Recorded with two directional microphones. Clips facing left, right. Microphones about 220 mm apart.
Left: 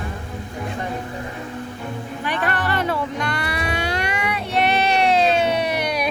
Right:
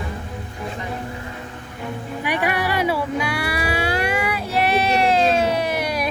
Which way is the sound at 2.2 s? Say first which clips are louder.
Right 2 dB; 10° right (ahead or behind).